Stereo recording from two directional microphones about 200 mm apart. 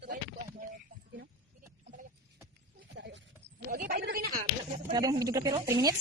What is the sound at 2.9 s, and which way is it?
Sheep, 65° right (ahead or behind).